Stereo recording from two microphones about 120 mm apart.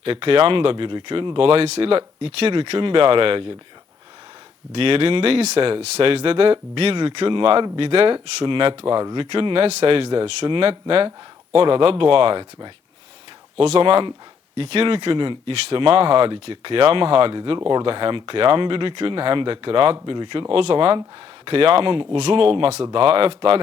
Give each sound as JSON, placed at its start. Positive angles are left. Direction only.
{"t": 0.0, "sound": "speech", "side_deg": -50}
{"t": 4.7, "sound": "speech", "side_deg": -50}
{"t": 13.6, "sound": "speech", "side_deg": -50}